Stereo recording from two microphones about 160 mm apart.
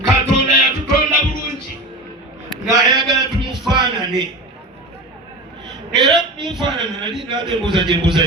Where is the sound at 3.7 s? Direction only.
30° right (ahead or behind).